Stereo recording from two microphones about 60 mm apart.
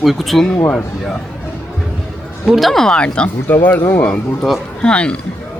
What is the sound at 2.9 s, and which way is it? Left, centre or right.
Speech, centre.